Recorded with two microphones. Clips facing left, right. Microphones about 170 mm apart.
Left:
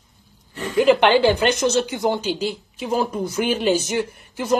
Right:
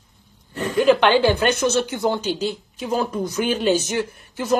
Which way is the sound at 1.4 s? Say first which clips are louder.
Even; 60° right (ahead or behind).